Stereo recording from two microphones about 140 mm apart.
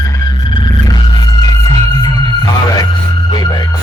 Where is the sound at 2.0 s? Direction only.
25° left (ahead or behind).